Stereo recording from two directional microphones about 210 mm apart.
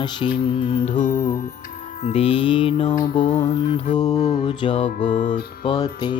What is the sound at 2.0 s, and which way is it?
Mantra, 25° left (ahead or behind).